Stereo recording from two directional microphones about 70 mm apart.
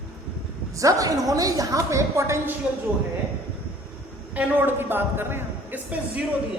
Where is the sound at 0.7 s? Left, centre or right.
Right.